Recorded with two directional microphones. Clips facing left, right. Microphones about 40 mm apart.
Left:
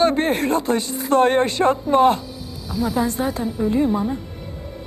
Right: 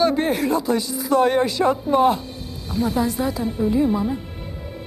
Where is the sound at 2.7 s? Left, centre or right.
Right.